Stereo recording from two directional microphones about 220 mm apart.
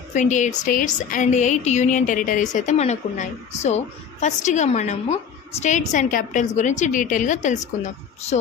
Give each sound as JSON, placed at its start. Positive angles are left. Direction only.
{"t": 0.1, "sound": "a woman's voice", "side_deg": 35}